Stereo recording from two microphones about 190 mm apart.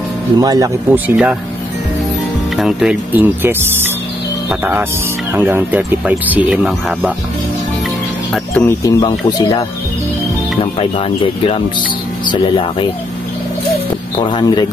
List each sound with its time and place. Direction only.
0.4 s speech: 20° right (ahead or behind)
2.5 s speech: centre (ahead or behind)
8.3 s speech: 10° left (ahead or behind)
9.0 s speech: 20° left (ahead or behind)
14.3 s speech: 20° left (ahead or behind)